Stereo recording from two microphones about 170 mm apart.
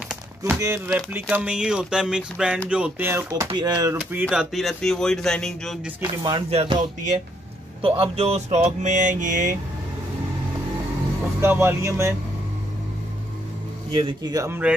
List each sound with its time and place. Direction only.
0.4 s speech: 15° right (ahead or behind)
4.0 s speech: 10° right (ahead or behind)
6.2 s speech: 30° right (ahead or behind); by 9.6 s 50° right (ahead or behind)
11.4 s speech: 15° right (ahead or behind)
14.3 s speech: 20° right (ahead or behind)